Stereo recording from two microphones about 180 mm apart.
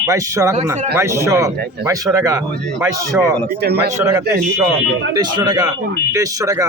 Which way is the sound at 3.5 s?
65° right (ahead or behind).